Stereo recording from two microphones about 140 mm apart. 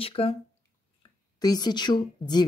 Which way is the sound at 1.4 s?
30° left (ahead or behind).